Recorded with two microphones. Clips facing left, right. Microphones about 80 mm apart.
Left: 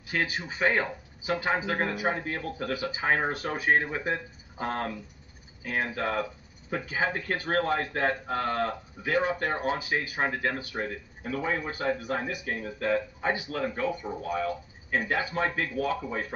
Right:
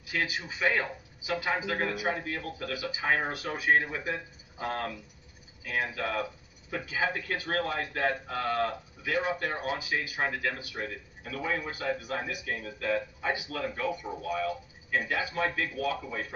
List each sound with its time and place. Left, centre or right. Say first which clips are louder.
0.1 s a man's voice: left 2 dB; left